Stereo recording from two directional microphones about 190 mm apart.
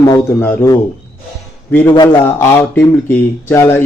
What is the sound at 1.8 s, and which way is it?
Speech, 25° left (ahead or behind).